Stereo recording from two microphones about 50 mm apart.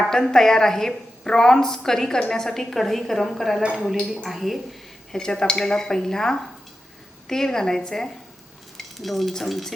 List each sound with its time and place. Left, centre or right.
0.0 s a woman's voice: centre
5.1 s a woman's voice: centre